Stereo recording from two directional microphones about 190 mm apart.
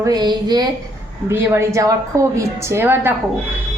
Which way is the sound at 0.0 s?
20° right (ahead or behind).